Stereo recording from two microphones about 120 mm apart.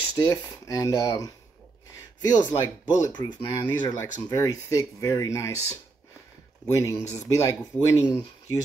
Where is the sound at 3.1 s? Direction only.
35° left (ahead or behind).